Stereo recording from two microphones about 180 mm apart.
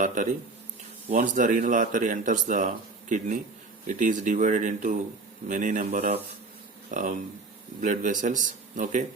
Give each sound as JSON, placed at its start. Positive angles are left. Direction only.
{"t": 0.0, "sound": "speech", "side_deg": -45}